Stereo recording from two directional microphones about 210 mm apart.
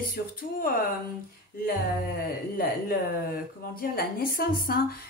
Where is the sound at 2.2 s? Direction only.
45° left (ahead or behind).